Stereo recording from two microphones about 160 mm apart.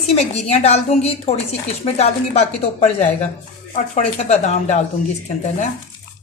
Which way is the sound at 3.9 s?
45° left (ahead or behind).